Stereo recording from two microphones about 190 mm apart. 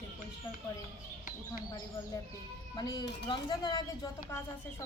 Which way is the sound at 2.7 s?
20° left (ahead or behind).